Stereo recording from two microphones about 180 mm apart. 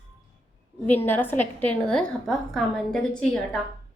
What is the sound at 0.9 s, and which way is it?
A woman's voice, 10° left (ahead or behind).